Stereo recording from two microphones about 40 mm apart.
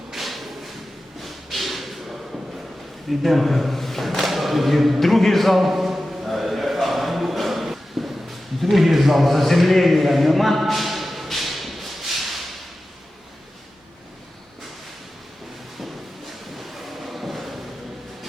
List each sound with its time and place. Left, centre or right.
0.1 s thump: centre
1.2 s a sound: centre
16.6 s train: centre